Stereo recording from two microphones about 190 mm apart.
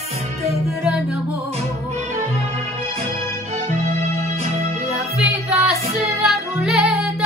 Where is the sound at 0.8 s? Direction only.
5° right (ahead or behind).